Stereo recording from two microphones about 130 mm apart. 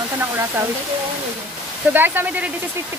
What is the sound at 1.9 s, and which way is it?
Speech, 15° right (ahead or behind).